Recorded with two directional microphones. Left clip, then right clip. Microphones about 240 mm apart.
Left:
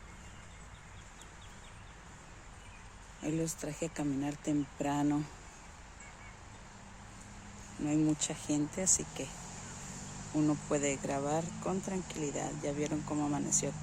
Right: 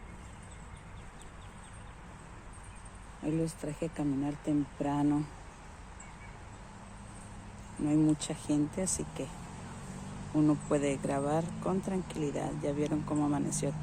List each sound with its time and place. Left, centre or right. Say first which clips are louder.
3.2 s speech: right 2 dB; centre
7.9 s speech: right 3 dB; centre
10.4 s speech: right 3 dB; centre